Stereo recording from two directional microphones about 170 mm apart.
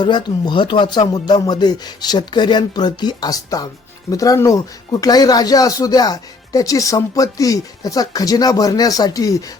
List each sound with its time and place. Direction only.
0.0 s speech: 25° left (ahead or behind)